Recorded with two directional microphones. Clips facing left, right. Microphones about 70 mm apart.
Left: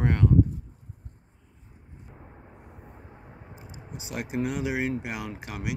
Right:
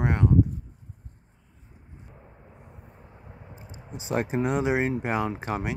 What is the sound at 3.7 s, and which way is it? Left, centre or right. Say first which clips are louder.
Speech: right 9 dB; right.